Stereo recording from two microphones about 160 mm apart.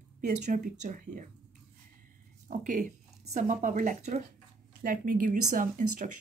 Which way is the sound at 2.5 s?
55° right (ahead or behind).